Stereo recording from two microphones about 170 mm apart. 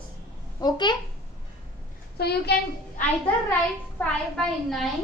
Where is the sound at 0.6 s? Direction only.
25° left (ahead or behind).